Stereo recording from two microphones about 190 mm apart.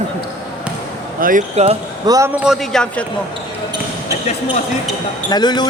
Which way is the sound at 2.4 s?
Centre (ahead or behind).